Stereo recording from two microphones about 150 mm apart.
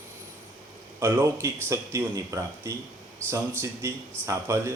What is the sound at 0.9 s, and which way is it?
A man's voice, 15° right (ahead or behind).